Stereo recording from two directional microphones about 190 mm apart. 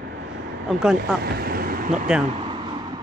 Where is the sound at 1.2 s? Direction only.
55° right (ahead or behind).